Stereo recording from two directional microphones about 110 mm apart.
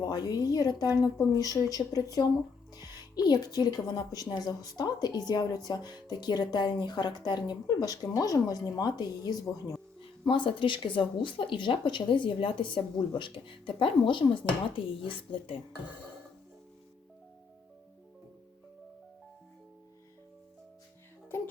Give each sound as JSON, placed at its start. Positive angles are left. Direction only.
{"t": 0.0, "sound": "speech", "side_deg": 35}
{"t": 3.2, "sound": "speech", "side_deg": 35}
{"t": 10.2, "sound": "speech", "side_deg": 50}